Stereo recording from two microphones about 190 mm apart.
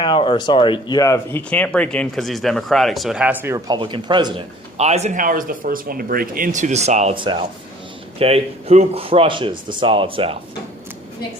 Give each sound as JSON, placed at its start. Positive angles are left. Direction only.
{"t": 0.0, "sound": "speech", "side_deg": 25}
{"t": 3.8, "sound": "speech", "side_deg": -25}
{"t": 4.8, "sound": "speech", "side_deg": -35}